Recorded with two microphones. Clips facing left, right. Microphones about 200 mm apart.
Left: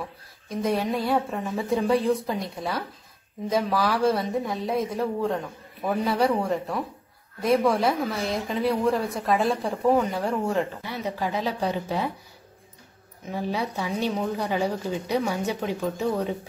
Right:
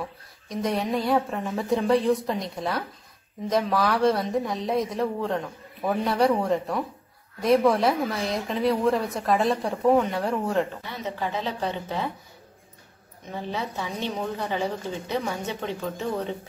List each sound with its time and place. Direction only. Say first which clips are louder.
0.0 s speech: right 1 dB; centre (ahead or behind)
11.1 s a woman's voice: left 2 dB; 10° left (ahead or behind)
13.3 s a woman's voice: left 3 dB; 10° left (ahead or behind)